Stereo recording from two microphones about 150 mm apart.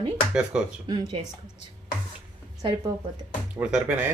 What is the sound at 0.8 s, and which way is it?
Speech, 30° right (ahead or behind).